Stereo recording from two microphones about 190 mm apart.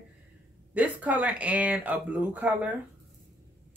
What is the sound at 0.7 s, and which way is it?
Speech, 10° right (ahead or behind).